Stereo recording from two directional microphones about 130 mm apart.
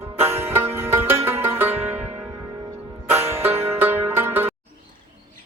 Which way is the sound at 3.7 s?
15° right (ahead or behind).